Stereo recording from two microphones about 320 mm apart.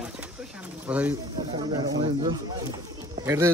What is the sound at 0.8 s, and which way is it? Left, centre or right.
Speech, centre.